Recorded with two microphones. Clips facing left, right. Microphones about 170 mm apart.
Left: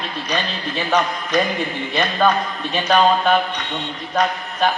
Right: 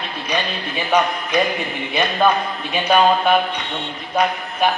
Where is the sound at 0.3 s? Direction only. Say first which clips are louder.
Right 2 dB; 10° right (ahead or behind).